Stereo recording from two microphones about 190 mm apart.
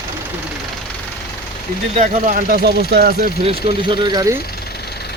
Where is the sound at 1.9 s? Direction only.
40° right (ahead or behind); by 3.3 s 55° right (ahead or behind).